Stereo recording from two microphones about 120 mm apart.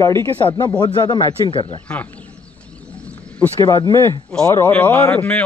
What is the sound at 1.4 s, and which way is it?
Speech, 45° left (ahead or behind).